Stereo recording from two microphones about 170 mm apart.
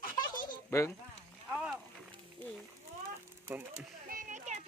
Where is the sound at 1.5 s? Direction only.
5° right (ahead or behind).